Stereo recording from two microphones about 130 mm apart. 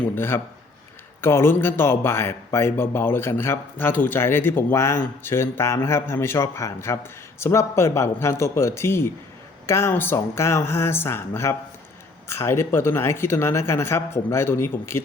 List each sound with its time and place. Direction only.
0.2 s speech: 15° left (ahead or behind)